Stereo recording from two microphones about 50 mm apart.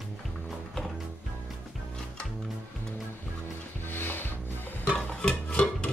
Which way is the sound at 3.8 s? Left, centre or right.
Left.